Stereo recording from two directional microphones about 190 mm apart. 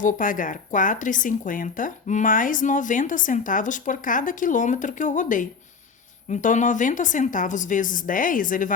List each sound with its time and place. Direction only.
0.0 s speech: 45° left (ahead or behind)